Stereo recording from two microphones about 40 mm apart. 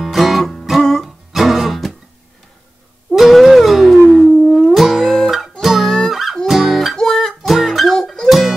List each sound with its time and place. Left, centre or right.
0.0 s music: centre
3.1 s music: centre